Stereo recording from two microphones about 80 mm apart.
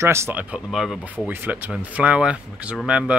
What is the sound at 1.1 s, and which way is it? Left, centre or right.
Speech, right.